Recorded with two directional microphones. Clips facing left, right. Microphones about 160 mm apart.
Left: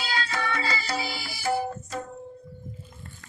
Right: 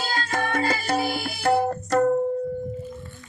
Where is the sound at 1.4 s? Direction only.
65° right (ahead or behind).